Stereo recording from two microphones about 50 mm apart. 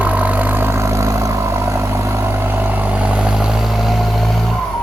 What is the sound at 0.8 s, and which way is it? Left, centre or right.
Vehicle, right.